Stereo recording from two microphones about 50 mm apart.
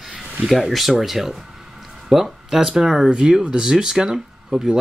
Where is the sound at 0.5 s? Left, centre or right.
Centre.